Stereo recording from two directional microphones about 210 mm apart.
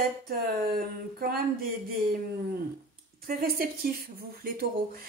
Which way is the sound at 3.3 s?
45° right (ahead or behind).